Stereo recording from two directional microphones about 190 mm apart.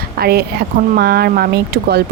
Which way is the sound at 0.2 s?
55° right (ahead or behind).